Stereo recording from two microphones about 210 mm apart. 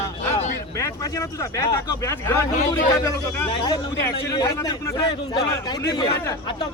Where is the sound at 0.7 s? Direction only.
15° left (ahead or behind).